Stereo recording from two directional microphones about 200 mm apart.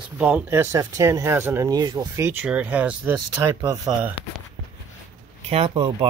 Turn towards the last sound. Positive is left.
turn(degrees=-25)  # may be behind; listen again after turning